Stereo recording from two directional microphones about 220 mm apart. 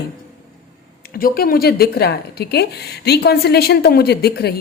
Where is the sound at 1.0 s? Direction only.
40° left (ahead or behind).